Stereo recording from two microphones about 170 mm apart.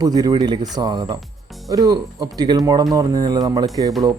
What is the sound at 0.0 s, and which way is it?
Speech, 20° right (ahead or behind).